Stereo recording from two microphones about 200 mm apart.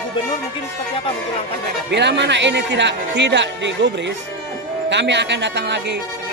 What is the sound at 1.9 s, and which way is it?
A man's voice, 60° right (ahead or behind).